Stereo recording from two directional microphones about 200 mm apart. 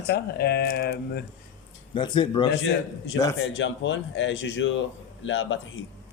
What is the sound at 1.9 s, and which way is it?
Speech, 25° left (ahead or behind).